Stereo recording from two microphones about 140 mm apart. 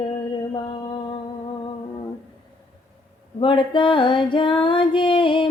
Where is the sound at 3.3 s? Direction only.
35° left (ahead or behind).